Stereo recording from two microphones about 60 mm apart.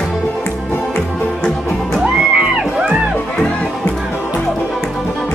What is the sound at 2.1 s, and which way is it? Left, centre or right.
Music, centre.